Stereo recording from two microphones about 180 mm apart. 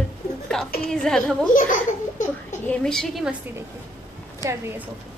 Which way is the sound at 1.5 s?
45° left (ahead or behind).